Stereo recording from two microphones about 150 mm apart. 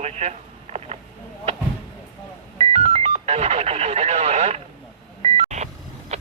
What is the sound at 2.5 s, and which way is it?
Telephone dialing, 45° right (ahead or behind).